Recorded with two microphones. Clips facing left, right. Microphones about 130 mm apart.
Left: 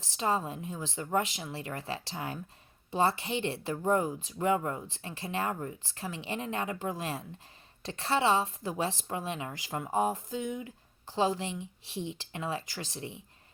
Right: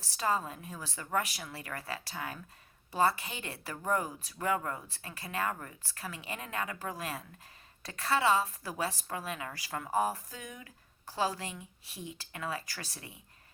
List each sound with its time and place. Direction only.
0.0 s a woman's voice: 20° left (ahead or behind)